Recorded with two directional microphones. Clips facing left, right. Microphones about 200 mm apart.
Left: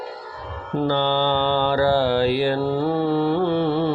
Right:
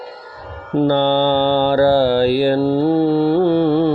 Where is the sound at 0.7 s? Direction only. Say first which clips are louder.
Right 6 dB; 40° right (ahead or behind).